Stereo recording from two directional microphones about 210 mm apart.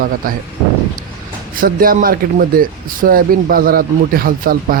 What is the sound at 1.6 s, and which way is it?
Speech, 45° right (ahead or behind).